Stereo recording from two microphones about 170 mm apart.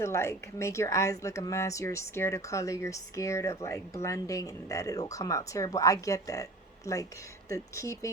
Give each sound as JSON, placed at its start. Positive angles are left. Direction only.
{"t": 0.0, "sound": "speech", "side_deg": 15}